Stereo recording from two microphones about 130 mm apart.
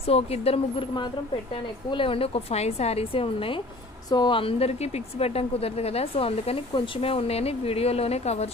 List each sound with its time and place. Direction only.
0.0 s a woman's voice: 50° left (ahead or behind)
1.9 s a woman's voice: 45° left (ahead or behind)